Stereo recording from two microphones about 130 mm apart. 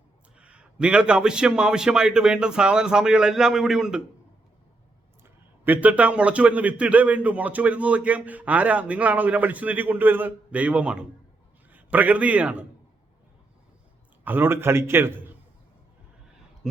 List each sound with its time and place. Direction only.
0.3 s a man's voice: 10° right (ahead or behind)
5.6 s a man's voice: 10° right (ahead or behind)
14.3 s a man's voice: 15° right (ahead or behind)